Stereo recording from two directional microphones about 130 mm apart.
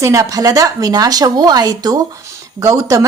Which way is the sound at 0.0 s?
25° right (ahead or behind).